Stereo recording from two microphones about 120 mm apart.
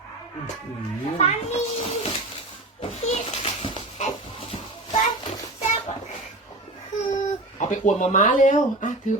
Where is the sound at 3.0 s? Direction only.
65° left (ahead or behind).